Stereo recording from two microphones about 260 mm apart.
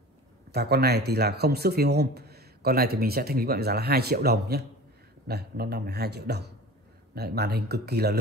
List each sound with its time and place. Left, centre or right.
0.5 s speech: right